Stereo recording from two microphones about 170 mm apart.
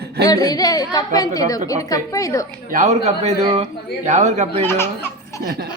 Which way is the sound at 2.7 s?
45° right (ahead or behind).